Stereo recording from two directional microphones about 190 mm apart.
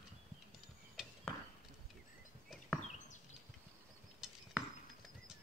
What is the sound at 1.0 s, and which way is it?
Chop, 5° right (ahead or behind).